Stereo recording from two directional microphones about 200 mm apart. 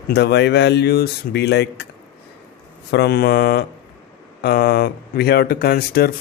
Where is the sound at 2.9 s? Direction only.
55° left (ahead or behind).